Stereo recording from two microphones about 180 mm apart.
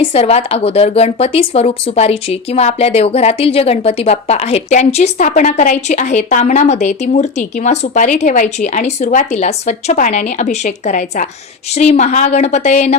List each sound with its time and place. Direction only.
0.0 s speech: 35° left (ahead or behind)